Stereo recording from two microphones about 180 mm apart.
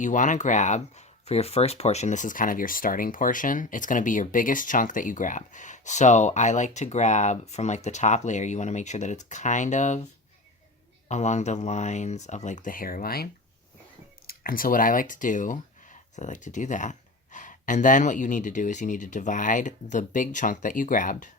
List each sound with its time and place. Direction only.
0.0 s speech: 45° left (ahead or behind)
11.1 s speech: 40° left (ahead or behind); by 13.2 s 55° left (ahead or behind)
14.3 s speech: 55° left (ahead or behind)